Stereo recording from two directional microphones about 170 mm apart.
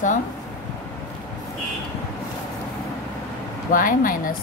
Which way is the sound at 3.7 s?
55° left (ahead or behind).